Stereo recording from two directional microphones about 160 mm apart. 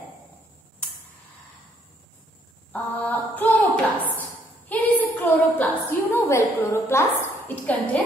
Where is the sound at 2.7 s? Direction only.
10° left (ahead or behind).